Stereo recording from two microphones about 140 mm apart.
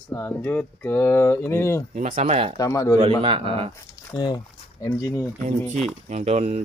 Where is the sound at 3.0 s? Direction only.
40° right (ahead or behind).